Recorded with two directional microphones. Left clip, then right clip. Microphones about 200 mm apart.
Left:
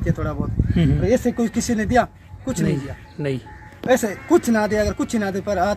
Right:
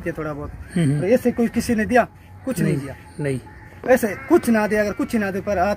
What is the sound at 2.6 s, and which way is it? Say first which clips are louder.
Speech: even; centre (ahead or behind).